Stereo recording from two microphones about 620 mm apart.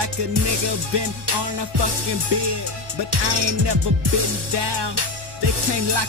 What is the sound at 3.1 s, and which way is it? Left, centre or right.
Music, right.